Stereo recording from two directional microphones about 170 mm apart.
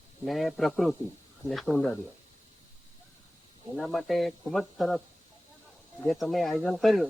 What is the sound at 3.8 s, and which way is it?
Speech, centre (ahead or behind).